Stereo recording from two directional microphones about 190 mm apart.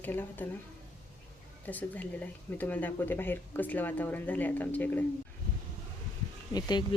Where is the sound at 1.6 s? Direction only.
10° left (ahead or behind).